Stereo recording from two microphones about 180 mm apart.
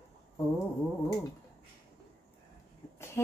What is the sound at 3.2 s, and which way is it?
Speech, 15° left (ahead or behind).